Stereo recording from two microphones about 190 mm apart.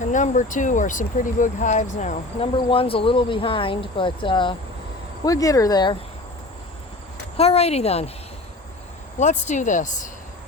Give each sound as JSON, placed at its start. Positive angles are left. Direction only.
{"t": 0.0, "sound": "speech", "side_deg": 40}
{"t": 7.3, "sound": "speech", "side_deg": 30}
{"t": 9.1, "sound": "speech", "side_deg": 40}